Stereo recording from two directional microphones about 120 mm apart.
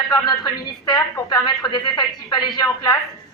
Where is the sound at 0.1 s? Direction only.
35° left (ahead or behind).